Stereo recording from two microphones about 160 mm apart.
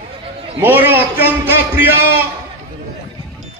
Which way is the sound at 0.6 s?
10° right (ahead or behind).